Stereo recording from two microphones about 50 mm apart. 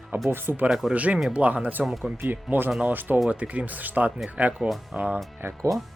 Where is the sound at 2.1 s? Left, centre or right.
Right.